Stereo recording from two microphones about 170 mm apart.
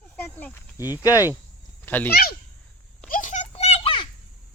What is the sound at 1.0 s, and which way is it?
Speech, 20° left (ahead or behind).